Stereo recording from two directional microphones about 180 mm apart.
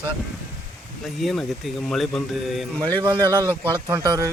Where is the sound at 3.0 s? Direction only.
25° right (ahead or behind).